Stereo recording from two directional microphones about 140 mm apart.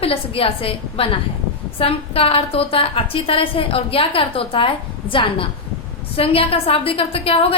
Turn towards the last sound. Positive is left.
turn(degrees=45)  # may be behind; listen again after turning